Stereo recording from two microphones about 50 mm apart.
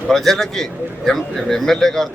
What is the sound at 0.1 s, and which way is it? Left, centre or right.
Speech, centre.